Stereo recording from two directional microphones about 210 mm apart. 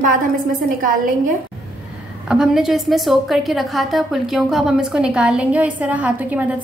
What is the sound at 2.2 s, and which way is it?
A woman's voice, 5° right (ahead or behind).